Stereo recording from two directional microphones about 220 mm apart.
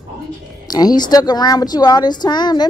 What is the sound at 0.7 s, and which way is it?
Speech, 15° left (ahead or behind).